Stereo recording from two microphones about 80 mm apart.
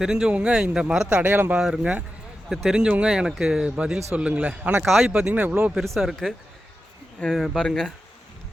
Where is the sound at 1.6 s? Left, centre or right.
Centre.